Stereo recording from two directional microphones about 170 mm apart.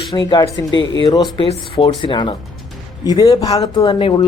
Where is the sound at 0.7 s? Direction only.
90° left.